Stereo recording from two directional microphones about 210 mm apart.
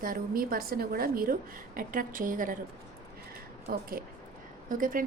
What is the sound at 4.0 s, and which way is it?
A woman's voice, 45° right (ahead or behind).